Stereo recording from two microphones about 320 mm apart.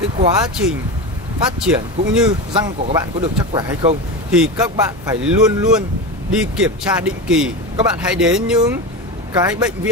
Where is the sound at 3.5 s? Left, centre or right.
Centre.